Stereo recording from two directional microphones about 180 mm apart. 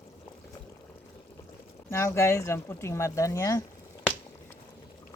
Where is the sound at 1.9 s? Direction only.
15° left (ahead or behind).